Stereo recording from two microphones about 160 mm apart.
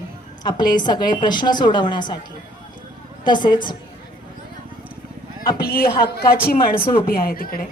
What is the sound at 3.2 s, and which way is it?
Speech, 30° left (ahead or behind).